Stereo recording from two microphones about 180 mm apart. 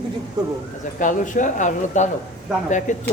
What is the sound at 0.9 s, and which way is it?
Speech, 45° left (ahead or behind).